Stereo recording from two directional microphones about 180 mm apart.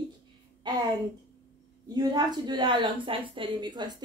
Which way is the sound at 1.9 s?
20° right (ahead or behind).